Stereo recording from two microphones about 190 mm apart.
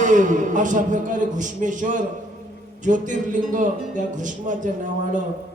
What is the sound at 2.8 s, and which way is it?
A man's voice, 40° right (ahead or behind).